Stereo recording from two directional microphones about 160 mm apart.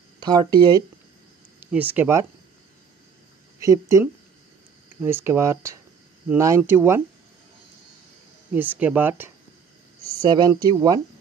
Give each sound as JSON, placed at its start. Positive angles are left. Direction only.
{"t": 0.2, "sound": "speech", "side_deg": -25}
{"t": 1.7, "sound": "speech", "side_deg": -10}
{"t": 3.6, "sound": "speech", "side_deg": -20}
{"t": 8.5, "sound": "speech", "side_deg": -10}
{"t": 10.2, "sound": "speech", "side_deg": -25}